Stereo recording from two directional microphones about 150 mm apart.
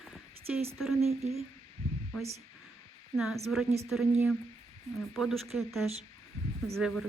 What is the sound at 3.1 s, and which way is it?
Speech, centre (ahead or behind).